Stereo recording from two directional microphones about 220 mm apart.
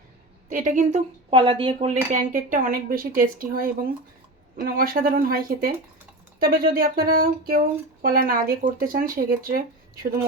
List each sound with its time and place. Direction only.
0.5 s a woman's voice: 35° right (ahead or behind)
2.1 s speech: 35° right (ahead or behind)